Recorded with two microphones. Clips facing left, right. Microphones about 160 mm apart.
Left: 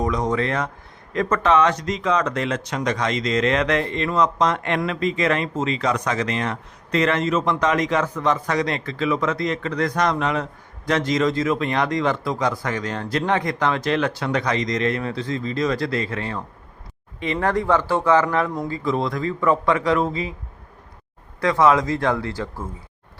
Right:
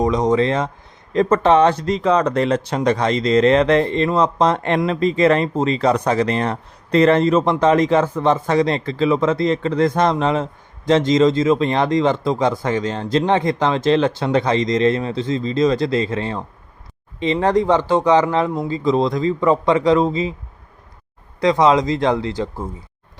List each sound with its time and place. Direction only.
0.0 s speech: 20° right (ahead or behind)
21.4 s speech: 20° right (ahead or behind)